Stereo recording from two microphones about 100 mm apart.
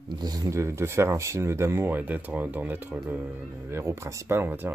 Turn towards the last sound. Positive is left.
turn(degrees=-20)  # may be behind; listen again after turning